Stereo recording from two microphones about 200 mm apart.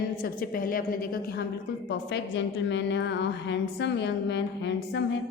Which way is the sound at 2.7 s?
60° left (ahead or behind).